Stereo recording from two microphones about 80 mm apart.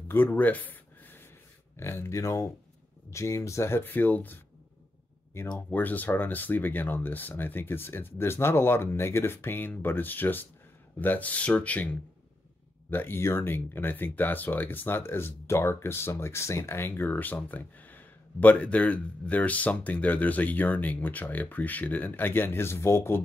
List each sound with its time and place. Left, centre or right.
0.1 s a sound: left
1.8 s speech: left
5.4 s speech: left
5.7 s speech: left